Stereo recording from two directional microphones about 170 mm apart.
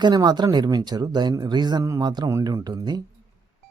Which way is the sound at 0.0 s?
25° right (ahead or behind).